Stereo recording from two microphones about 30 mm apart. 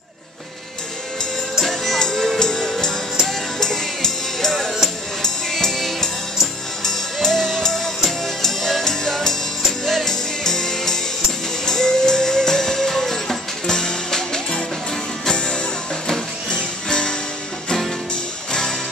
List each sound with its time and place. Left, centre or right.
2.0 s music: left; by 5.9 s centre
6.8 s music: centre
10.0 s music: centre
13.7 s music: left
16.9 s music: left
18.5 s music: centre